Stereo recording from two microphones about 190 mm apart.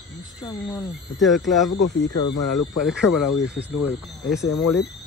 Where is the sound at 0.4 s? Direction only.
20° left (ahead or behind).